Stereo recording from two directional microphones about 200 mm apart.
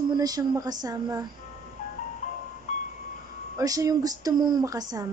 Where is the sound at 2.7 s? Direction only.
35° left (ahead or behind).